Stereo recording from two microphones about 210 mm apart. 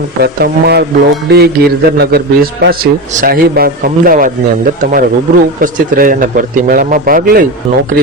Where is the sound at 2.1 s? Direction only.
50° right (ahead or behind).